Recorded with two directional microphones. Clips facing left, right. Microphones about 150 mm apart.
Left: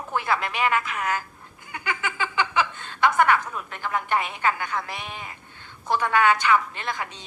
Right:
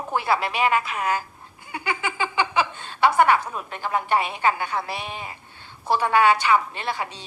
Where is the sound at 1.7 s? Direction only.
20° right (ahead or behind).